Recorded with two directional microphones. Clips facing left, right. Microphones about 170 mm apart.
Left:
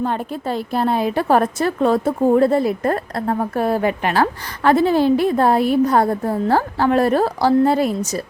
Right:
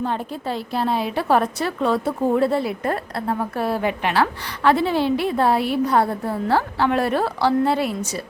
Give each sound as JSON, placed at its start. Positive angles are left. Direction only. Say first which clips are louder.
{"t": 0.0, "sound": "a woman's voice", "louder": "left 3 dB", "side_deg": 50}